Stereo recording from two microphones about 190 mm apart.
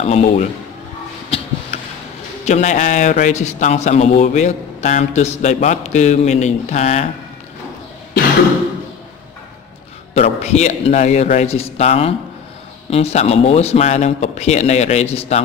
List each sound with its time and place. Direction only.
0.0 s a man's voice: 35° left (ahead or behind)
1.3 s a sound: 30° left (ahead or behind)
2.4 s a man's voice: 40° left (ahead or behind)
10.1 s a man's voice: 35° left (ahead or behind)